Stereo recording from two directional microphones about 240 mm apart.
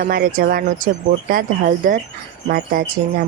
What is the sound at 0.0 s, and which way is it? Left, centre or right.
Speech, right.